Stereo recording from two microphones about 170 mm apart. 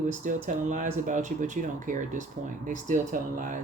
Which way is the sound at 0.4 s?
50° right (ahead or behind).